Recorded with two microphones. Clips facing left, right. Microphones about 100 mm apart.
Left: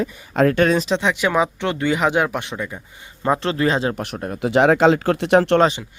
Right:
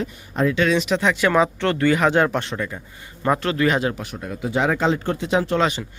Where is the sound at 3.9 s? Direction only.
70° left (ahead or behind).